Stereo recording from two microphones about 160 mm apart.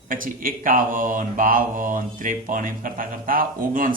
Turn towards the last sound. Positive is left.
turn(degrees=-60)  # may be behind; listen again after turning